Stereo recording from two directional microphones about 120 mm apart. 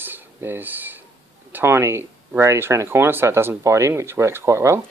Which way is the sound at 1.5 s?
20° right (ahead or behind).